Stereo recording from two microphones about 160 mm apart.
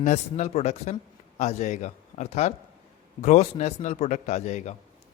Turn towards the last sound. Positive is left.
turn(degrees=45)  # may be behind; listen again after turning